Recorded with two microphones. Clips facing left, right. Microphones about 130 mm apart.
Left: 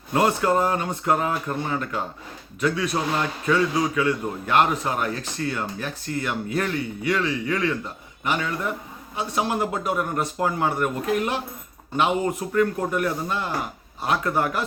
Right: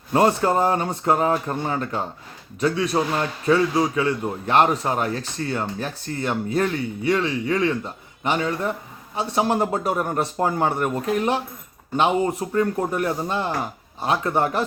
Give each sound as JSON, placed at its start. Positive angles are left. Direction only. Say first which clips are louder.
{"t": 0.1, "sound": "a man's voice", "louder": "right 2 dB", "side_deg": -30}